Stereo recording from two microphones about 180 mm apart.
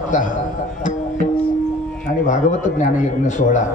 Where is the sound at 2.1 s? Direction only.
45° left (ahead or behind).